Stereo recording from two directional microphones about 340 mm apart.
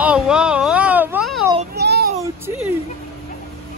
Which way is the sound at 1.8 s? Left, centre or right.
Right.